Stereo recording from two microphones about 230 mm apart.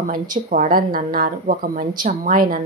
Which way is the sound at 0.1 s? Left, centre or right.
Right.